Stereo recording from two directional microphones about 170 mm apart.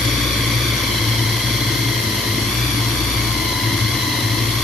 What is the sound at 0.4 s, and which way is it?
Vehicle, centre (ahead or behind).